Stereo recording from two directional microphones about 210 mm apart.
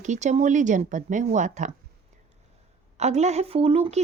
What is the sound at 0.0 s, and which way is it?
Speech, 35° right (ahead or behind).